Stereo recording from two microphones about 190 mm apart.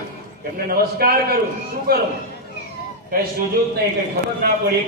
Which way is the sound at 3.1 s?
50° right (ahead or behind).